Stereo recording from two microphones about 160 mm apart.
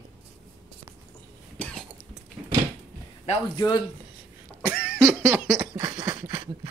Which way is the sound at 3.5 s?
25° left (ahead or behind).